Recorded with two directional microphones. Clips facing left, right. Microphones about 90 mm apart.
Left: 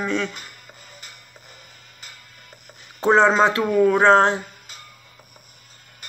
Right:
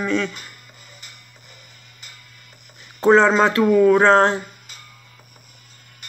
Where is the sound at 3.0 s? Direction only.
20° left (ahead or behind).